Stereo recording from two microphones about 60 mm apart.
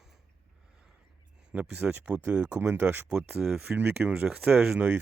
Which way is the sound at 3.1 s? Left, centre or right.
Centre.